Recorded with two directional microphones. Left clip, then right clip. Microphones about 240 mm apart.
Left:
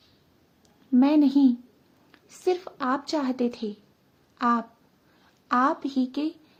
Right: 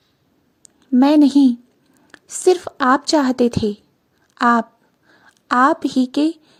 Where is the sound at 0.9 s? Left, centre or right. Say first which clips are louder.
Right 8 dB; right.